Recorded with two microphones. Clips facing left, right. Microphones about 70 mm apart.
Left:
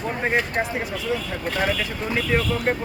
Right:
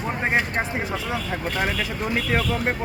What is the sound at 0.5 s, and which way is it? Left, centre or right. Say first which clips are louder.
Speech: even; right.